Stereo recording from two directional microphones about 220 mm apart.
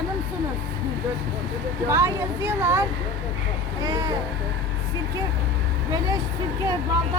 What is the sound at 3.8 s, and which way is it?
Speech, 15° right (ahead or behind).